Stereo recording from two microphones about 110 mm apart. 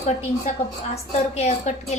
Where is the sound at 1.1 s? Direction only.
85° left.